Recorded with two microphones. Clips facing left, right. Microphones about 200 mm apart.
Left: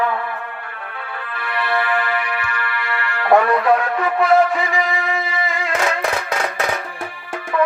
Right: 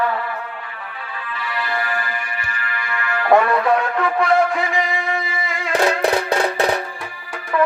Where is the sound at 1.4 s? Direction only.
60° left (ahead or behind).